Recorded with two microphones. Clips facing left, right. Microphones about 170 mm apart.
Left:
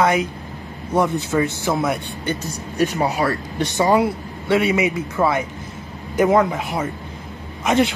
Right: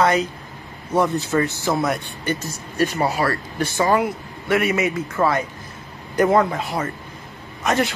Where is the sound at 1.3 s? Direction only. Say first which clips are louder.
Left 1 dB; 10° left (ahead or behind).